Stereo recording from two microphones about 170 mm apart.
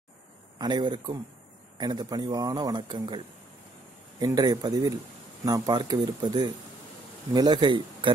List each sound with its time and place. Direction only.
0.6 s a man's voice: 25° right (ahead or behind)